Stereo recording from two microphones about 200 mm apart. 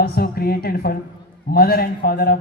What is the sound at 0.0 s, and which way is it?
A man's voice, 50° left (ahead or behind).